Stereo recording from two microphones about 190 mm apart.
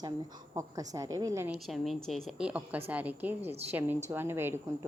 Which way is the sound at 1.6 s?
Centre (ahead or behind).